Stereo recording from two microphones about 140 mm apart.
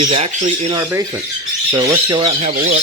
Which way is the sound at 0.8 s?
20° right (ahead or behind).